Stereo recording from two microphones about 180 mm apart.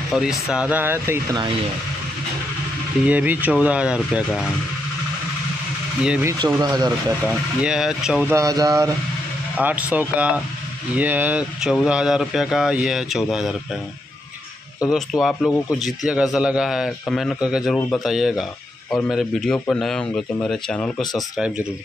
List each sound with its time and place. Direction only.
0.1 s speech: centre (ahead or behind)
3.1 s speech: 10° right (ahead or behind)
6.2 s speech: 20° right (ahead or behind)
7.2 s speech: 5° right (ahead or behind)
8.4 s speech: 20° right (ahead or behind)
9.6 s speech: 10° right (ahead or behind)
14.9 s speech: centre (ahead or behind)